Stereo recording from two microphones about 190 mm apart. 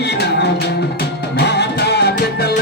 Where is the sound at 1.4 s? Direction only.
60° left (ahead or behind).